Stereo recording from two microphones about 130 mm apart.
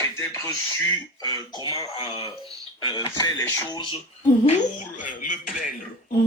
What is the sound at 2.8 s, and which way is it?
Speech, 30° left (ahead or behind).